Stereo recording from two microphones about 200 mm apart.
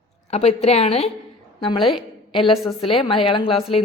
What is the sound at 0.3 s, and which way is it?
A woman's voice, 30° left (ahead or behind).